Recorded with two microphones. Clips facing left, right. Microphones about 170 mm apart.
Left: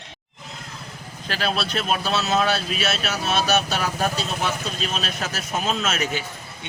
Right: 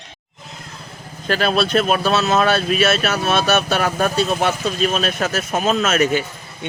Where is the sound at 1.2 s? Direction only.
50° right (ahead or behind).